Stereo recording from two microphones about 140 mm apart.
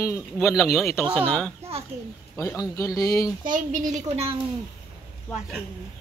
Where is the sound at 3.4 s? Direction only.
70° right (ahead or behind).